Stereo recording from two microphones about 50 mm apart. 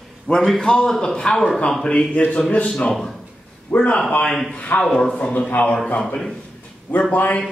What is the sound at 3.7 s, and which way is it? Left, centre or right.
Speech, left.